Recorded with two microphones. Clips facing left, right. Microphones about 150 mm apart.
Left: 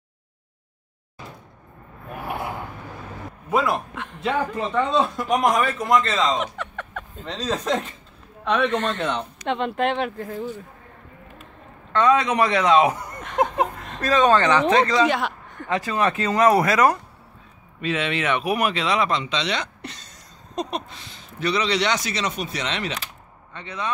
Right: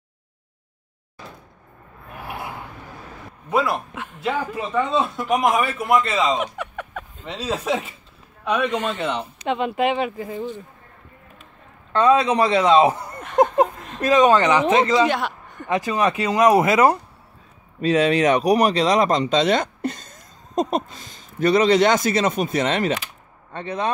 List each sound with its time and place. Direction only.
3.4 s a man's voice: centre (ahead or behind)
11.9 s a man's voice: 30° right (ahead or behind)
13.2 s a man's voice: centre (ahead or behind)
14.0 s speech: 15° right (ahead or behind)
15.0 s a man's voice: centre (ahead or behind)
15.7 s speech: 15° right (ahead or behind)
17.7 s speech: 40° right (ahead or behind)